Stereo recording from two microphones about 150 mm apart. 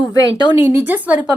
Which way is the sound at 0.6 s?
10° right (ahead or behind).